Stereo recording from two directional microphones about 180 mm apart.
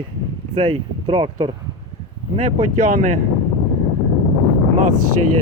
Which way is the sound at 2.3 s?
45° right (ahead or behind).